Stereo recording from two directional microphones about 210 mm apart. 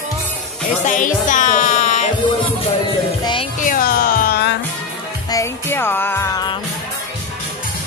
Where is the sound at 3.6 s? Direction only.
40° left (ahead or behind).